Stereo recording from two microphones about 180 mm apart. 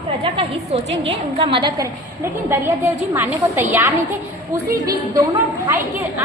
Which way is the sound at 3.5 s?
10° right (ahead or behind).